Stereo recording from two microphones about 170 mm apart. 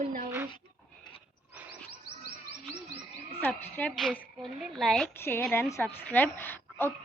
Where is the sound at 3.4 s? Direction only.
10° left (ahead or behind).